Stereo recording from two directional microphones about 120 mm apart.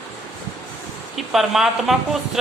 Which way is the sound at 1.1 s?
Centre (ahead or behind).